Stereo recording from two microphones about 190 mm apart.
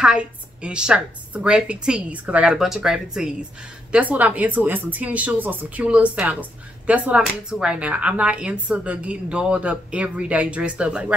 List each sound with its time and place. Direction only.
0.0 s a woman's voice: 5° right (ahead or behind)